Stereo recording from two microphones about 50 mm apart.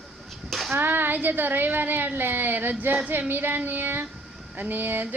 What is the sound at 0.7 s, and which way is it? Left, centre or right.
Speech, right.